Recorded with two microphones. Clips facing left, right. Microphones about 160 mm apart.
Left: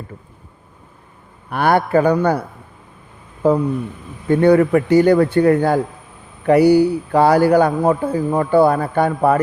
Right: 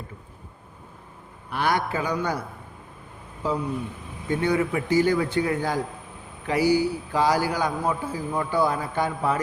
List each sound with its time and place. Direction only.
1.5 s a man's voice: 55° left (ahead or behind)
3.4 s a man's voice: 55° left (ahead or behind)